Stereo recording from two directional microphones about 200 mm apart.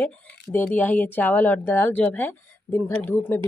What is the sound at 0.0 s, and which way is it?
A woman's voice, 10° left (ahead or behind).